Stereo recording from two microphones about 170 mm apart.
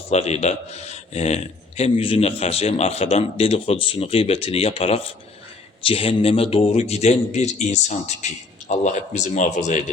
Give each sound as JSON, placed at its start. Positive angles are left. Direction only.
{"t": 0.1, "sound": "a man's voice", "side_deg": 40}